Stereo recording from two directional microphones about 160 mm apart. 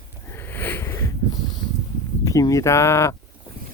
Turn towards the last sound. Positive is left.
turn(degrees=15)  # may be behind; listen again after turning